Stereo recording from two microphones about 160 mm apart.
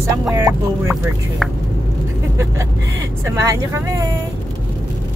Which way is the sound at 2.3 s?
20° right (ahead or behind).